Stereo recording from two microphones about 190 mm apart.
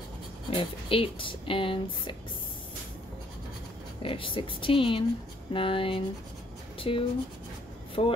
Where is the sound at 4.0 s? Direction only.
30° left (ahead or behind).